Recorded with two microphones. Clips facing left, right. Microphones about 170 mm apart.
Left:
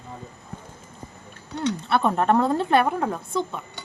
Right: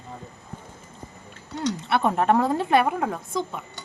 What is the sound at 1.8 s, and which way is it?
A woman's voice, 15° right (ahead or behind).